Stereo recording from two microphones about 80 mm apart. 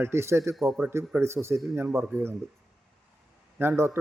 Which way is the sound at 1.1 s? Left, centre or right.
Right.